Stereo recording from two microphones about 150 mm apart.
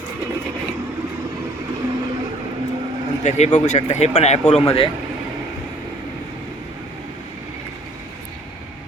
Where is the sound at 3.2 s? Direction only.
55° left (ahead or behind).